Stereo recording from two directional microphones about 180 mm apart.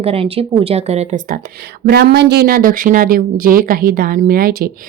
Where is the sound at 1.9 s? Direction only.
65° right (ahead or behind).